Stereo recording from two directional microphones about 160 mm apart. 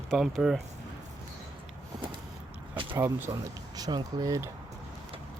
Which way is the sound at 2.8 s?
30° right (ahead or behind).